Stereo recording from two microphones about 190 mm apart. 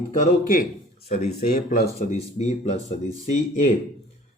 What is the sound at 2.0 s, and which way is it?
Speech, 35° left (ahead or behind).